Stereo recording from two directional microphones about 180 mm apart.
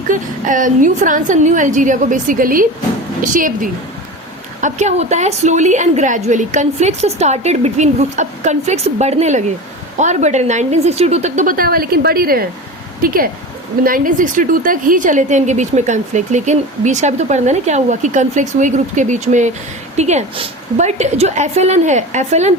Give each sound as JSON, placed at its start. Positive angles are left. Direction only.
{"t": 0.1, "sound": "a woman's voice", "side_deg": -45}